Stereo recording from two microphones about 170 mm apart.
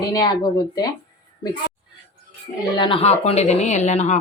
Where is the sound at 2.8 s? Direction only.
30° left (ahead or behind).